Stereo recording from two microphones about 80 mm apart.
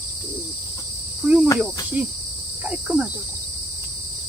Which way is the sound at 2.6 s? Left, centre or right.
Centre.